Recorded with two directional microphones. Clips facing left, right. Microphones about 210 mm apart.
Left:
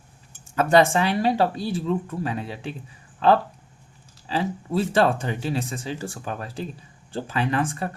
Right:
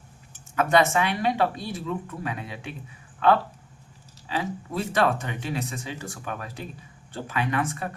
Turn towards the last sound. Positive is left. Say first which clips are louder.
# left 3 dB
turn(degrees=30)  # may be behind; listen again after turning